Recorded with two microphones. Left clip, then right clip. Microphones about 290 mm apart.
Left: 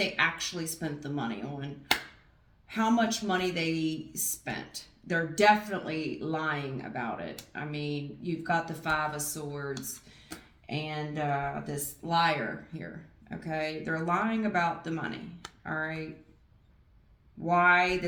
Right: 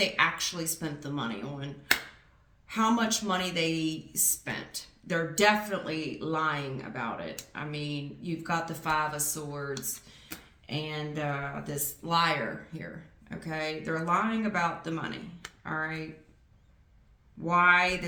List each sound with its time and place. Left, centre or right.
0.0 s speech: centre
10.7 s speech: centre
17.5 s speech: centre